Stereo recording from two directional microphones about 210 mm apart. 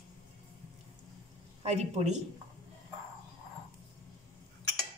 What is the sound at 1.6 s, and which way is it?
Speech, 30° right (ahead or behind).